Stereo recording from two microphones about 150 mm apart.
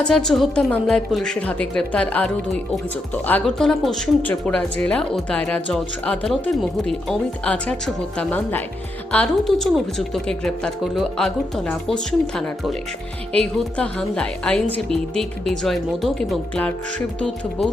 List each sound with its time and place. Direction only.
0.0 s a woman's voice: 5° left (ahead or behind)